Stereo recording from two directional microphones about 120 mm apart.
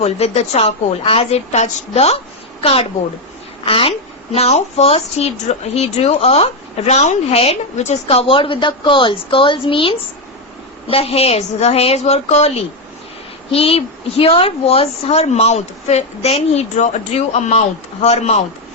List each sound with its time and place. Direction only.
0.0 s a woman's voice: 60° left (ahead or behind)